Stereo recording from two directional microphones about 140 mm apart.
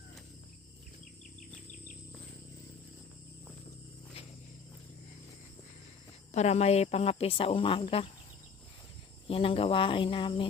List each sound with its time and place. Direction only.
6.3 s speech: 50° left (ahead or behind)
9.2 s speech: 40° left (ahead or behind)